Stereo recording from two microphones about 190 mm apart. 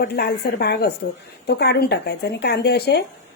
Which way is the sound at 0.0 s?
60° left (ahead or behind).